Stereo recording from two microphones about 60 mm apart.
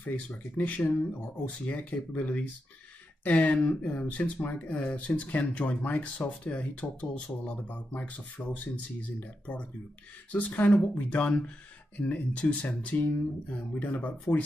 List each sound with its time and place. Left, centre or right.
0.6 s speech: left